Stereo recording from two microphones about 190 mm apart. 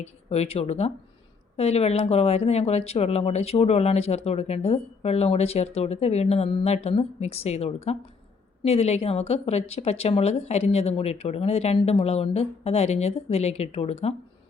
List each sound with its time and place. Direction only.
0.0 s speech: 35° left (ahead or behind)